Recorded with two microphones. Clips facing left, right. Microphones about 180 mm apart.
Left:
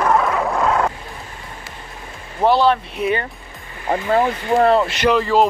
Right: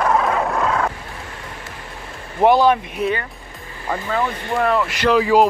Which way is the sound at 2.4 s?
15° right (ahead or behind).